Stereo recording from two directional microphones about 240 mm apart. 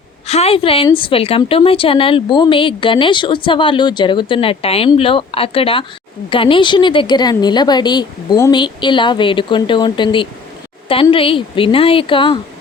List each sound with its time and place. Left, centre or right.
0.3 s a woman's voice: left